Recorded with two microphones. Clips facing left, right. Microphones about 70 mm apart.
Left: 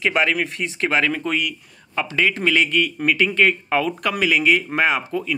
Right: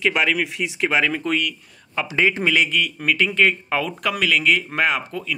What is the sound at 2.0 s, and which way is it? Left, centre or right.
Speech, centre.